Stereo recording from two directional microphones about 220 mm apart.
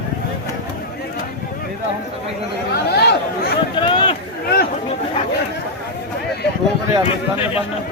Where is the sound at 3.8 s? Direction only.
20° left (ahead or behind).